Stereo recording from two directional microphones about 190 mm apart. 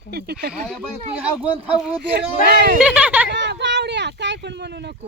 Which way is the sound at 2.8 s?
5° right (ahead or behind).